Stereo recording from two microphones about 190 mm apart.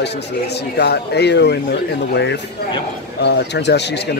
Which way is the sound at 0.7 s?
60° left (ahead or behind).